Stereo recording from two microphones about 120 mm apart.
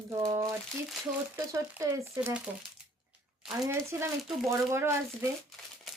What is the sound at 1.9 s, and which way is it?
Speech, 25° right (ahead or behind).